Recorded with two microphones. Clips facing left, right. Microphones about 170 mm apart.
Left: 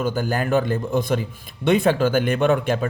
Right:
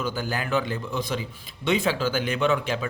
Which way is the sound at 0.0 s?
50° left (ahead or behind).